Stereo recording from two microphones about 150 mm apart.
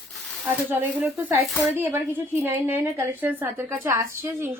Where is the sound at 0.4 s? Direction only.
15° right (ahead or behind).